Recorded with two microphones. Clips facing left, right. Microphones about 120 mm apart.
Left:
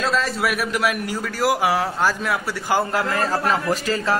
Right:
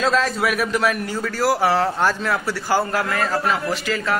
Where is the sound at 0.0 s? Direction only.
Centre (ahead or behind).